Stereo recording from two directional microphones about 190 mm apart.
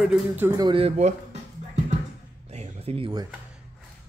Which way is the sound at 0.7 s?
30° right (ahead or behind).